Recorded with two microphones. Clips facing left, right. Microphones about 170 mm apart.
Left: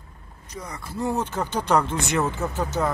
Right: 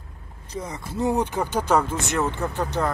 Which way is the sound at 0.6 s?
20° right (ahead or behind).